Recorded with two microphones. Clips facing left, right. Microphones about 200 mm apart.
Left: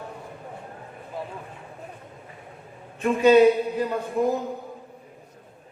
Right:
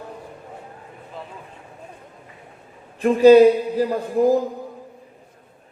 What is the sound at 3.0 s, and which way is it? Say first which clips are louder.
A man's voice: right 5 dB; 35° right (ahead or behind).